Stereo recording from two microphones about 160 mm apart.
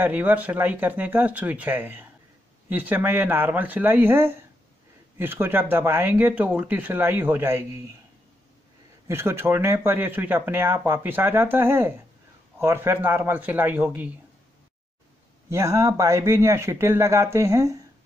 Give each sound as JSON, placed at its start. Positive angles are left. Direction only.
{"t": 0.0, "sound": "speech", "side_deg": -10}
{"t": 9.0, "sound": "speech", "side_deg": -15}
{"t": 15.5, "sound": "speech", "side_deg": -20}